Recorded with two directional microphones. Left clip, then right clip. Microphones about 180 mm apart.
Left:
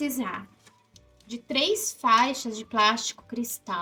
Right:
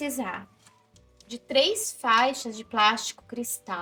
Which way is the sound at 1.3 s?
20° right (ahead or behind).